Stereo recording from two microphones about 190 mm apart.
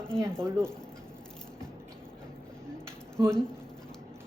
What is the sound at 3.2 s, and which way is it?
Speech, 20° right (ahead or behind).